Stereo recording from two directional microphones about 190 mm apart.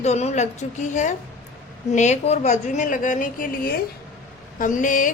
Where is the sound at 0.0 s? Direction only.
35° left (ahead or behind).